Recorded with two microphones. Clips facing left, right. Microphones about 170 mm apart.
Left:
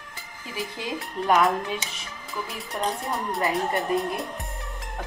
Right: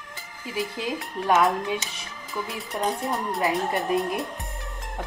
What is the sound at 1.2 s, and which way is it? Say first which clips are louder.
Speech: even; 5° right (ahead or behind).